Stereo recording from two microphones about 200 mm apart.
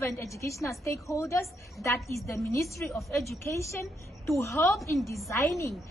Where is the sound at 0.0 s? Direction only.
15° left (ahead or behind).